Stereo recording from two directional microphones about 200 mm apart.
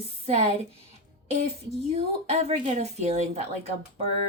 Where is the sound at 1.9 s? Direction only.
30° right (ahead or behind).